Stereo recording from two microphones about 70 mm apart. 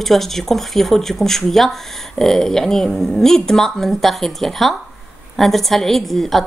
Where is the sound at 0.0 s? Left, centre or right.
Centre.